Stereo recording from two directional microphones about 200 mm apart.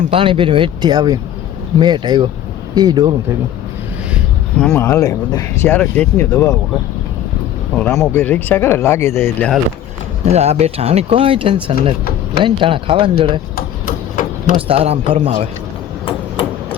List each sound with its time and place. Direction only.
0.1 s speech: 25° right (ahead or behind)
4.5 s speech: 10° left (ahead or behind)
7.8 s speech: 15° left (ahead or behind)
10.3 s speech: 30° right (ahead or behind)
13.6 s a sound: 45° left (ahead or behind)
14.7 s speech: 30° right (ahead or behind)